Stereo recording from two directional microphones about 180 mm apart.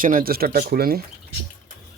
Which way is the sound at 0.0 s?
50° right (ahead or behind).